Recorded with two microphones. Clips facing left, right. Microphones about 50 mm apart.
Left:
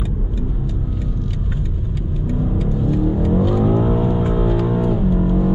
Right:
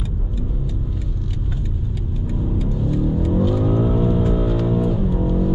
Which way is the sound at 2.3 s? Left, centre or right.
Left.